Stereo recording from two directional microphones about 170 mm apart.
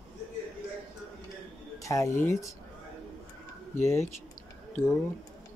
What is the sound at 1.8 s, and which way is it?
Speech, 20° left (ahead or behind).